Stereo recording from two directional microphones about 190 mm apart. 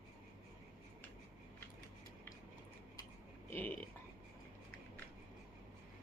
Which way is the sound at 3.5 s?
10° left (ahead or behind).